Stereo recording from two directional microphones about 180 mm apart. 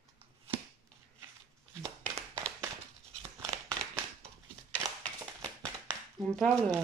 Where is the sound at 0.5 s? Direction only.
30° right (ahead or behind).